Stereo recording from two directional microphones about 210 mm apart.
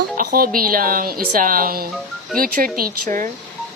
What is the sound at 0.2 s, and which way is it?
Speech, 45° right (ahead or behind).